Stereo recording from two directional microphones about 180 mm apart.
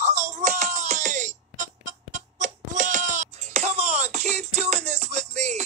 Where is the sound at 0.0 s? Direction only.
40° right (ahead or behind).